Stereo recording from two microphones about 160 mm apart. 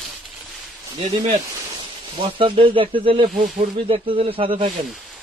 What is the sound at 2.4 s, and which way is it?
A man's voice, 30° right (ahead or behind).